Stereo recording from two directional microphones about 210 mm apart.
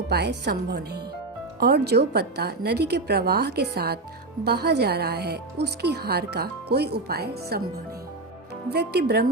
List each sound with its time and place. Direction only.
0.1 s speech: 50° right (ahead or behind)
8.7 s speech: 50° right (ahead or behind)